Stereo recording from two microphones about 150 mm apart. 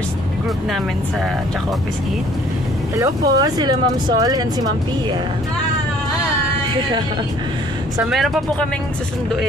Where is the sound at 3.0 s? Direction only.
30° right (ahead or behind).